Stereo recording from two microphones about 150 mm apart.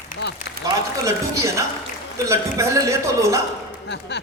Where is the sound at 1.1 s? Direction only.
20° right (ahead or behind).